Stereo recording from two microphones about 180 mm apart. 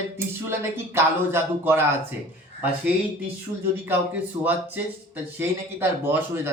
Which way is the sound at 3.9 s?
10° right (ahead or behind).